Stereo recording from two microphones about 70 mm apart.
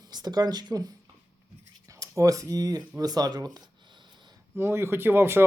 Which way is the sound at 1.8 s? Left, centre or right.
Right.